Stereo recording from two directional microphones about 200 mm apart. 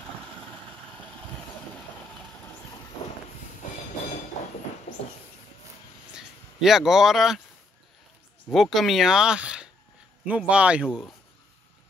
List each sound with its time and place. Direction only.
3.6 s train: 40° left (ahead or behind)
6.1 s speech: centre (ahead or behind)
8.5 s speech: centre (ahead or behind)